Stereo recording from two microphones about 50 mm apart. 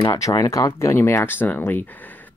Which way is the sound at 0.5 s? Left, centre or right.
Left.